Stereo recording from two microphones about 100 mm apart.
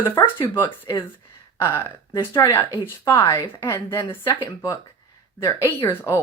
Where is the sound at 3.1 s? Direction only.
40° left (ahead or behind).